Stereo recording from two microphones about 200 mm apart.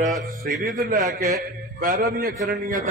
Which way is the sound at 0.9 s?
40° right (ahead or behind).